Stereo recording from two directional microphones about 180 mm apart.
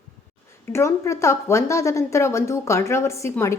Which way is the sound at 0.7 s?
15° left (ahead or behind).